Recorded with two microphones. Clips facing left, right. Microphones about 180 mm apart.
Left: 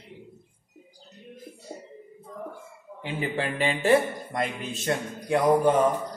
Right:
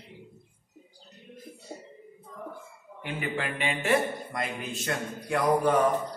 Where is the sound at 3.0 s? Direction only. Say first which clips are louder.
Left 3 dB; 30° left (ahead or behind).